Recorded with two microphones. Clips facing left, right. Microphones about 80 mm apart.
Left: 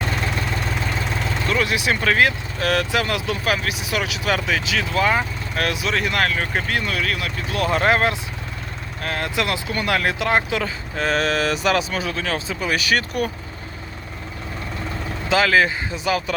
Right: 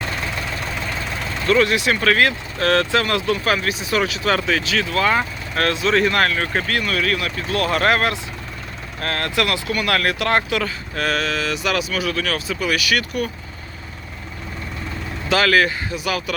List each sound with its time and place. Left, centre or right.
1.5 s speech: centre
6.7 s speech: centre
7.0 s speech: centre
11.2 s speech: left
15.3 s speech: centre